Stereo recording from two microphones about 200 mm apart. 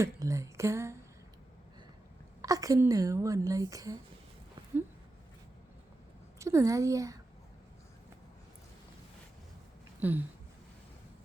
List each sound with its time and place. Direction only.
0.0 s a sound: 15° right (ahead or behind)
2.4 s a woman's voice: 15° right (ahead or behind)
6.4 s a woman's voice: 15° right (ahead or behind)
10.0 s a woman's voice: 10° right (ahead or behind)